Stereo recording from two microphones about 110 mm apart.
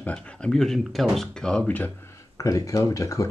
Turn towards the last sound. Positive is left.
turn(degrees=30)  # may be behind; listen again after turning